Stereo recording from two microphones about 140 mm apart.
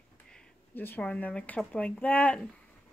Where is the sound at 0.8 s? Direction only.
10° left (ahead or behind).